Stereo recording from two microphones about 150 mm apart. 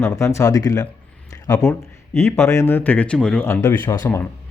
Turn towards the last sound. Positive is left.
turn(degrees=25)  # may be behind; listen again after turning